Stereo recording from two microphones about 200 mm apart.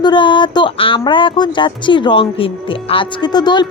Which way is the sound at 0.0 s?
25° left (ahead or behind).